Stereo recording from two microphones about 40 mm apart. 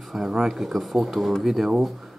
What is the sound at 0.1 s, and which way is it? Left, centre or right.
Speech, centre.